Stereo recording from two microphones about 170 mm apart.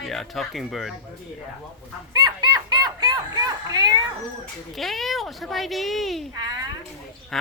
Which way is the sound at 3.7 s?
20° right (ahead or behind).